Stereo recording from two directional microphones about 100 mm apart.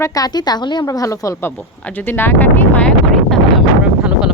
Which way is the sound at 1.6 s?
20° left (ahead or behind).